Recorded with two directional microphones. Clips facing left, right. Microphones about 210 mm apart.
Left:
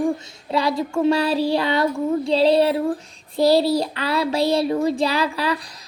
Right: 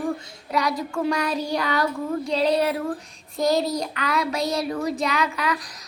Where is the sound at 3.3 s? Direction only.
30° left (ahead or behind).